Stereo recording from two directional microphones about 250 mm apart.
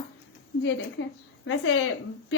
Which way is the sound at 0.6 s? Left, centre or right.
Left.